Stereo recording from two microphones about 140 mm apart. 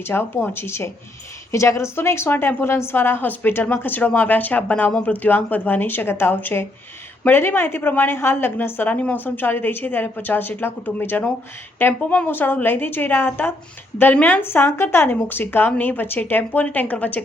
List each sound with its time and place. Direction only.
0.0 s a woman's voice: 15° left (ahead or behind)